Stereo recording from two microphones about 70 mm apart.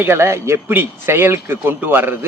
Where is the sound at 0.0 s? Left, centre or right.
Right.